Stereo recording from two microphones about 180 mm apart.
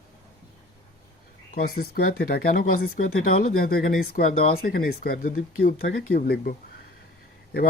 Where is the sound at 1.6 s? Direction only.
60° left (ahead or behind).